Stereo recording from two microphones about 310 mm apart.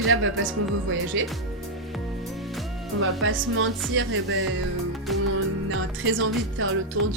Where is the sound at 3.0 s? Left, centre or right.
Right.